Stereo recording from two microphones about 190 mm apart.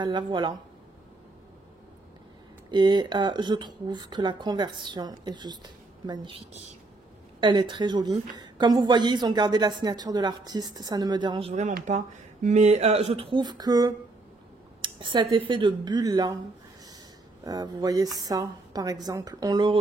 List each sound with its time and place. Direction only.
0.0 s a woman's voice: 25° right (ahead or behind)
2.7 s a woman's voice: 25° right (ahead or behind)
17.5 s a woman's voice: 20° right (ahead or behind)